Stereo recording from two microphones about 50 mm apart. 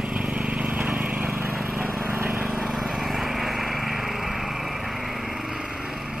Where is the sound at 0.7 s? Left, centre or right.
Right.